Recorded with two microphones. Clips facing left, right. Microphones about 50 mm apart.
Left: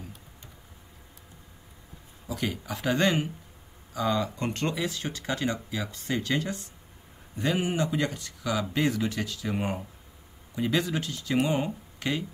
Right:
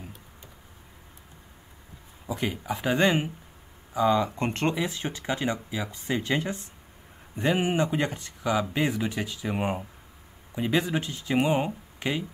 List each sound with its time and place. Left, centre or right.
2.2 s speech: right